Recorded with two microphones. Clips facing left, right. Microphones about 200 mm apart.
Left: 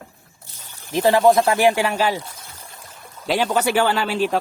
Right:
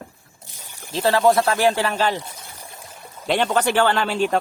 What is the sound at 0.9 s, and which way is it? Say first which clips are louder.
Speech: left 2 dB; 15° left (ahead or behind).